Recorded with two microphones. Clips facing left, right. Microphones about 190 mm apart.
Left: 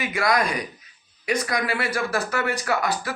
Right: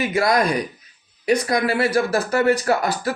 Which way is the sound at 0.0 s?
30° right (ahead or behind).